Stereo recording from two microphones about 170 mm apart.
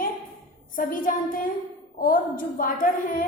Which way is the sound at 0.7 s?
55° left (ahead or behind).